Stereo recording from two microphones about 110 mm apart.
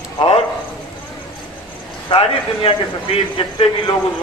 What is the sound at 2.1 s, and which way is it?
Speech, 60° left (ahead or behind).